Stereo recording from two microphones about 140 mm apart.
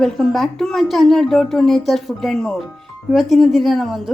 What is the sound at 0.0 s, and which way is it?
Speech, centre (ahead or behind).